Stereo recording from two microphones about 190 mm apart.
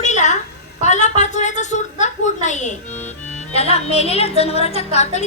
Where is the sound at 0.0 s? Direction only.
40° left (ahead or behind).